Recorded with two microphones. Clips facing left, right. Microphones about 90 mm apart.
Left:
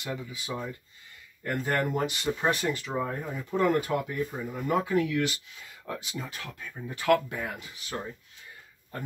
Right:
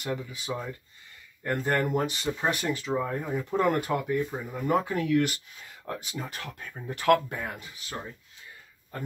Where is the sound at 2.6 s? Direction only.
15° right (ahead or behind).